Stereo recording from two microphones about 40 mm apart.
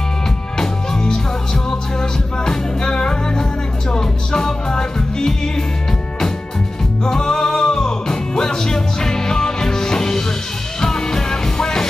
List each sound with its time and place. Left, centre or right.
0.6 s music: centre
7.1 s music: centre